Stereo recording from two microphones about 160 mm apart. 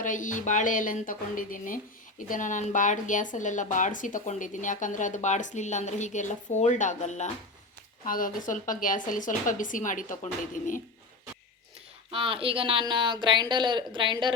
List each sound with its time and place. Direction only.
0.0 s a woman's voice: 55° left (ahead or behind)
8.0 s a woman's voice: 60° left (ahead or behind)
12.1 s speech: 35° right (ahead or behind)